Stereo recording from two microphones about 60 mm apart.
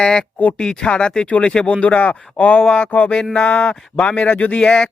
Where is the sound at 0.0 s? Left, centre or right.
Centre.